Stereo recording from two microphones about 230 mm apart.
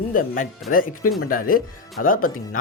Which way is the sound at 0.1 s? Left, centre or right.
Left.